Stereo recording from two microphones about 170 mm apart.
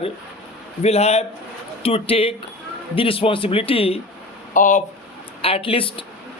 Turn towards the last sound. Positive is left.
turn(degrees=30)  # may be behind; listen again after turning